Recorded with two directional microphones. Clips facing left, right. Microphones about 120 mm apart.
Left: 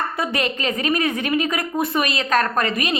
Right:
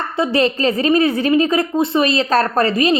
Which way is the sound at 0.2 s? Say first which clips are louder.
Right 11 dB; 30° right (ahead or behind).